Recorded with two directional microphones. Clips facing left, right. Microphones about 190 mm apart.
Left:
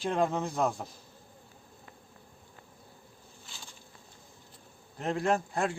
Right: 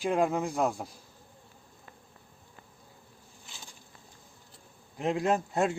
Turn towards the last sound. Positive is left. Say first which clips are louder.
# right 2 dB
turn(degrees=-20)  # may be behind; listen again after turning